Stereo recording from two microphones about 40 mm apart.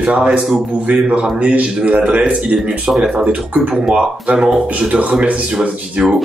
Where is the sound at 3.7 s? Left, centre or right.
Centre.